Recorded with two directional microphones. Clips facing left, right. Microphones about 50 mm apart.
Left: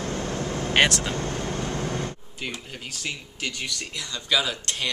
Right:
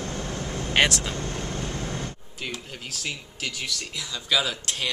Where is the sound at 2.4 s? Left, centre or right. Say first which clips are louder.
Even; centre.